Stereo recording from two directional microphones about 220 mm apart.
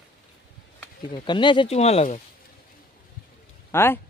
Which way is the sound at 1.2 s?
20° left (ahead or behind).